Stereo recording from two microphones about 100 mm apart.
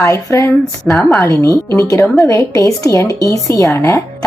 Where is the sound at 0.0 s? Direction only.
30° left (ahead or behind).